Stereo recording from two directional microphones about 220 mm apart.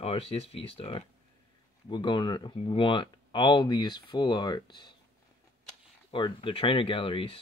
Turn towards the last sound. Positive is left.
turn(degrees=25)  # may be behind; listen again after turning